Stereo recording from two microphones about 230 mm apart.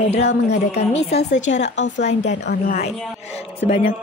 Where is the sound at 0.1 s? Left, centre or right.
Left.